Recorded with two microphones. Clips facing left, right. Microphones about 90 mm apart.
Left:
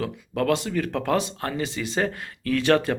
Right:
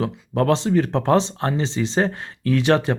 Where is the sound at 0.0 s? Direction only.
25° right (ahead or behind).